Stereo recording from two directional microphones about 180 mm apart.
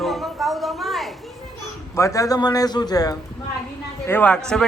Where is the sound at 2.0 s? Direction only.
15° left (ahead or behind).